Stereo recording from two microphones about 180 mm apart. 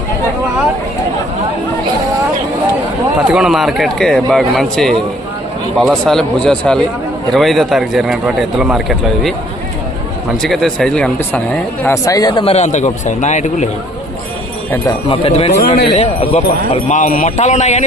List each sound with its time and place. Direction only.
3.3 s a man's voice: centre (ahead or behind)
10.4 s speech: 5° left (ahead or behind); by 13.7 s 40° left (ahead or behind)
15.1 s speech: 30° left (ahead or behind)